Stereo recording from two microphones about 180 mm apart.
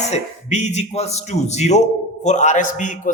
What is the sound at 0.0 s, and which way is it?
A man's voice, 40° left (ahead or behind).